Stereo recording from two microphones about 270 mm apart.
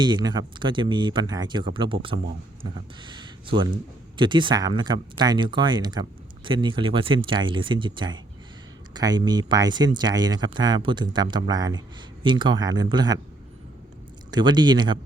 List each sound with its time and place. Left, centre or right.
0.0 s speech: centre
14.3 s speech: centre